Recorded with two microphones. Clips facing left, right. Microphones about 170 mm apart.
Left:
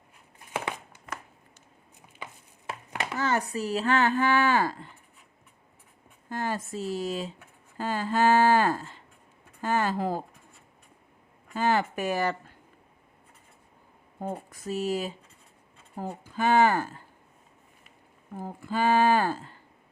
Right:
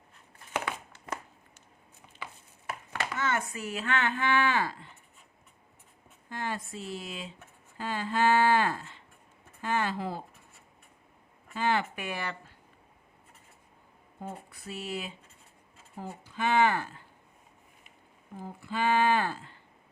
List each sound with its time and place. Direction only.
0.5 s crumpling: 15° left (ahead or behind)
3.2 s speech: 35° left (ahead or behind)
6.2 s speech: 40° left (ahead or behind)
11.5 s speech: 40° left (ahead or behind)
14.2 s speech: 45° left (ahead or behind)
18.3 s speech: 45° left (ahead or behind)